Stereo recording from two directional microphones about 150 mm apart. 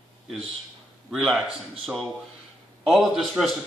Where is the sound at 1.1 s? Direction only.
Centre (ahead or behind).